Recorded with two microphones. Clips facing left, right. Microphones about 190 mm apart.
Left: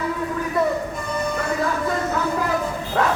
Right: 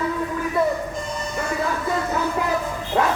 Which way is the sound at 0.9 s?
60° left (ahead or behind).